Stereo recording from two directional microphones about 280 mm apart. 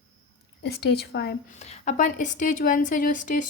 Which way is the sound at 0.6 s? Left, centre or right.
Left.